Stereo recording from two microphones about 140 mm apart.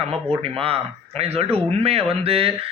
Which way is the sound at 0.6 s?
45° right (ahead or behind).